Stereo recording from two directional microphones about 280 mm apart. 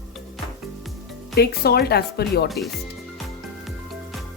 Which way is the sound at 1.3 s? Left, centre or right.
Left.